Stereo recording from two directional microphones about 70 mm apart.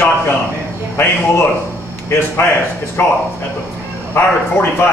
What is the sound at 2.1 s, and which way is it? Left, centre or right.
Speech, left.